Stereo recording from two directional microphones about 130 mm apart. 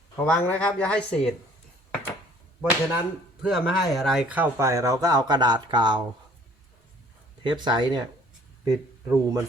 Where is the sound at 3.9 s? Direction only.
Centre (ahead or behind).